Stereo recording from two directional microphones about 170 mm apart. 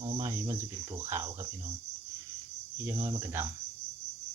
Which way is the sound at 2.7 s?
15° right (ahead or behind).